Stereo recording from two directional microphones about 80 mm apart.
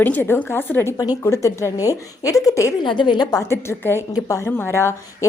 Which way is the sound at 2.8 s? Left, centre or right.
Left.